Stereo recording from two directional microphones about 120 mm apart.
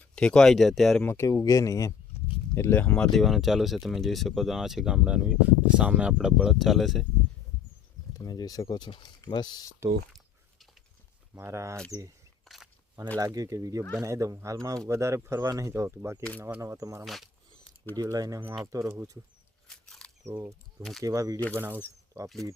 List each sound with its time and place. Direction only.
0.0 s speech: 10° left (ahead or behind)
1.0 s speech: 25° left (ahead or behind); by 7.0 s centre (ahead or behind)
8.1 s speech: 35° left (ahead or behind)
11.3 s speech: 25° right (ahead or behind)
12.5 s a sound: 5° left (ahead or behind)
13.1 s speech: 30° right (ahead or behind)
19.6 s a sound: 5° left (ahead or behind)
20.2 s speech: 25° right (ahead or behind)
21.5 s speech: 15° right (ahead or behind)